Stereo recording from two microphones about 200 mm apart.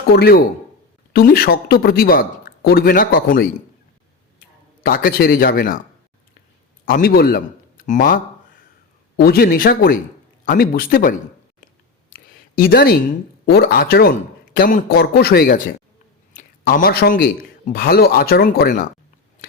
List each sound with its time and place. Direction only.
0.2 s speech: 50° left (ahead or behind)
6.8 s a man's voice: 45° left (ahead or behind)
12.5 s speech: 50° left (ahead or behind)
16.3 s a sound: 40° left (ahead or behind)
17.7 s speech: 50° left (ahead or behind)